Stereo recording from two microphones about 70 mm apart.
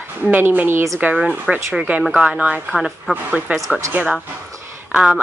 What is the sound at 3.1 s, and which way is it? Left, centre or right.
Speech, centre.